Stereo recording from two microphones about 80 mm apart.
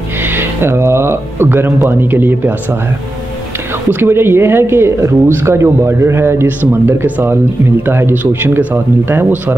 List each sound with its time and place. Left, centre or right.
0.3 s speech: right
4.0 s speech: right